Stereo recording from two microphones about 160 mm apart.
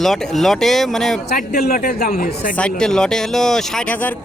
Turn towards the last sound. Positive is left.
turn(degrees=10)  # may be behind; listen again after turning